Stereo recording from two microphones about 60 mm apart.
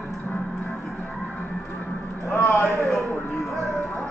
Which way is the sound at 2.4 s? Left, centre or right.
Left.